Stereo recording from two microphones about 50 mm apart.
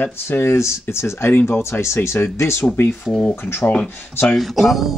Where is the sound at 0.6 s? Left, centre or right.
Left.